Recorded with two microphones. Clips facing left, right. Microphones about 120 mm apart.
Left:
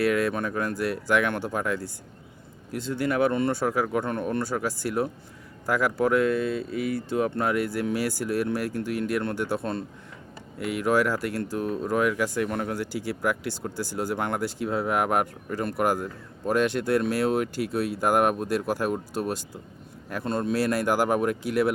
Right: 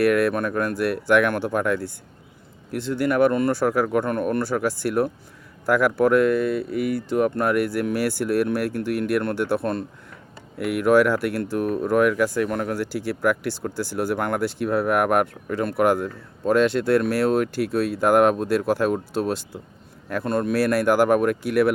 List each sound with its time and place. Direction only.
0.0 s speech: 65° right (ahead or behind)
12.7 s speech: 20° left (ahead or behind)
14.0 s speech: 60° right (ahead or behind)